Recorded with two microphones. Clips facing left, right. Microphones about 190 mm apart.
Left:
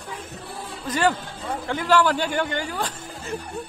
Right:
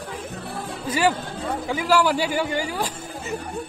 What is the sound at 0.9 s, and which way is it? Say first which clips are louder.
A man's voice: right 1 dB; 10° right (ahead or behind).